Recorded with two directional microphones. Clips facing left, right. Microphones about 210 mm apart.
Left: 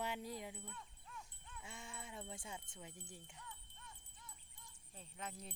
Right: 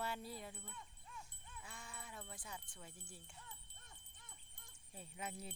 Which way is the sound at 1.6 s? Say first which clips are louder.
Left 3 dB; 25° left (ahead or behind).